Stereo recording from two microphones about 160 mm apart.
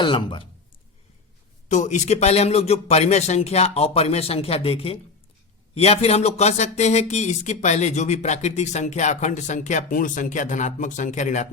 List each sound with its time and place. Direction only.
0.0 s a man's voice: 30° left (ahead or behind)
1.6 s a man's voice: 50° left (ahead or behind)